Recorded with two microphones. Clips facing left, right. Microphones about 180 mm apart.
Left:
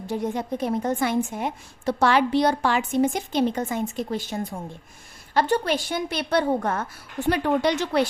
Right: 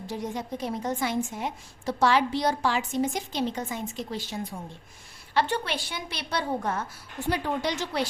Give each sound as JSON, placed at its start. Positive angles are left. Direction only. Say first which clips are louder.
{"t": 0.1, "sound": "a woman's voice", "louder": "left 6 dB", "side_deg": 55}